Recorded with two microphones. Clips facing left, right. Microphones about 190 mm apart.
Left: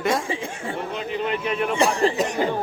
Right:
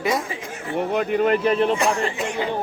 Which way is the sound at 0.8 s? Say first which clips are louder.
Right 9 dB; 55° right (ahead or behind).